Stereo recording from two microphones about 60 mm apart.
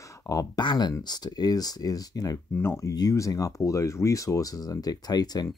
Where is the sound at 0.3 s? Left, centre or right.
Left.